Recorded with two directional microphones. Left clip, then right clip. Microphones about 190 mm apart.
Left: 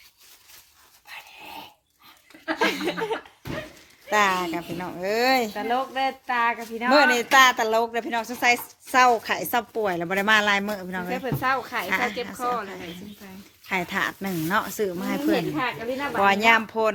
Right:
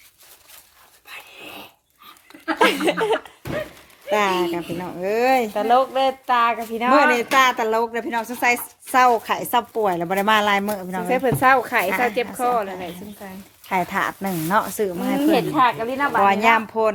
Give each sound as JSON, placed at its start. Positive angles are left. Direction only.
{"t": 2.6, "sound": "chuckle", "side_deg": -50}
{"t": 4.1, "sound": "a woman's voice", "side_deg": 0}
{"t": 5.5, "sound": "speech", "side_deg": -35}
{"t": 6.9, "sound": "a woman's voice", "side_deg": 0}
{"t": 11.1, "sound": "speech", "side_deg": -40}
{"t": 11.9, "sound": "a woman's voice", "side_deg": 0}
{"t": 12.4, "sound": "speech", "side_deg": -40}
{"t": 13.7, "sound": "a woman's voice", "side_deg": 0}
{"t": 15.3, "sound": "speech", "side_deg": -50}
{"t": 16.2, "sound": "a woman's voice", "side_deg": 0}